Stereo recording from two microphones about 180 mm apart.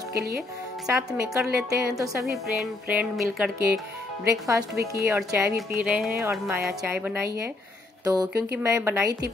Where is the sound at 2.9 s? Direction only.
5° right (ahead or behind).